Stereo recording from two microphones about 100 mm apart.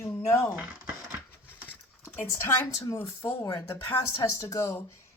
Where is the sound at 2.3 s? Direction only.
30° left (ahead or behind).